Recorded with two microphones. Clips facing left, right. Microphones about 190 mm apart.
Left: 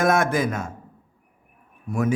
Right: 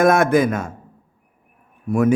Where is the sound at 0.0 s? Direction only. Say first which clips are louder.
Right 6 dB; 55° right (ahead or behind).